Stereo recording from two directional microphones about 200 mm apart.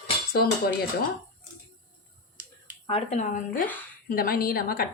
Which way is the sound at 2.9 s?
30° left (ahead or behind).